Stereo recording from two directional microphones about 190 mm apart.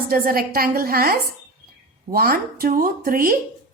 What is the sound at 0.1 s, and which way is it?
Speech, 50° right (ahead or behind).